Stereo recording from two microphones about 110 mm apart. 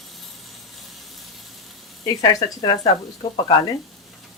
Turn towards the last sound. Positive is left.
turn(degrees=35)  # may be behind; listen again after turning